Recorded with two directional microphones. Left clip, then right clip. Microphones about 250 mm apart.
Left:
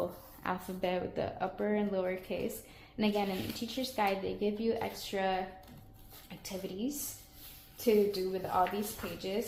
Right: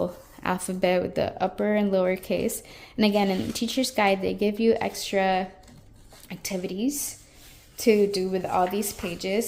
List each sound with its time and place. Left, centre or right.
0.4 s a woman's voice: right